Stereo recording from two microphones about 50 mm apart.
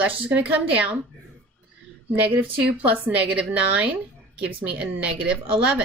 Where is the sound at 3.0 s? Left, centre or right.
Right.